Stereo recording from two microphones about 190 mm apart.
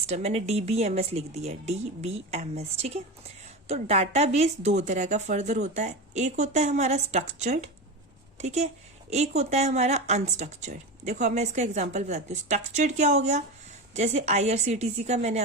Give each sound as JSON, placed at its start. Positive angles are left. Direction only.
{"t": 0.1, "sound": "a woman's voice", "side_deg": -35}